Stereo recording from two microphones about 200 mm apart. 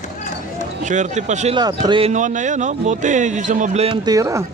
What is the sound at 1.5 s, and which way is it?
Speech, 20° right (ahead or behind).